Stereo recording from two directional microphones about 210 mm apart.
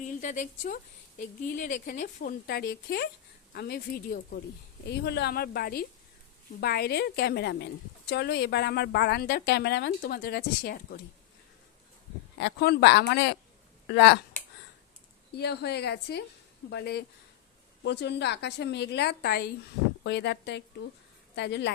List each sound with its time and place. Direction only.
0.0 s a woman's voice: 35° left (ahead or behind)
12.4 s a woman's voice: 50° left (ahead or behind)
15.3 s a woman's voice: 50° left (ahead or behind)